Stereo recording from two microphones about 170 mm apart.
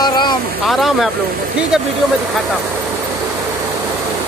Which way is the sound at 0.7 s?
Centre (ahead or behind).